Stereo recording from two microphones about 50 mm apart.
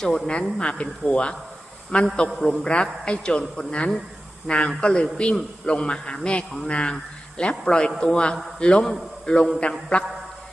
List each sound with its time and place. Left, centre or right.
0.0 s a man's voice: centre